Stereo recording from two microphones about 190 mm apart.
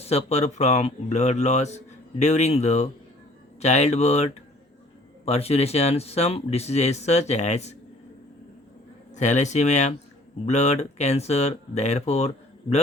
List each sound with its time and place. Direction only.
0.0 s speech: 35° left (ahead or behind)
9.1 s speech: 40° left (ahead or behind)